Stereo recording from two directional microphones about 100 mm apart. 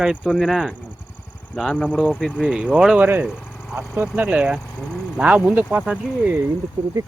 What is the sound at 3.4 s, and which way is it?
Vehicle, 20° left (ahead or behind).